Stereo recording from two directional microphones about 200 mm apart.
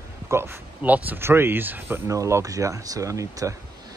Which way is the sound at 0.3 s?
10° right (ahead or behind).